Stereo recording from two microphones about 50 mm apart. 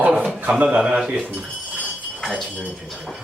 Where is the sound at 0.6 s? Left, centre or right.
Right.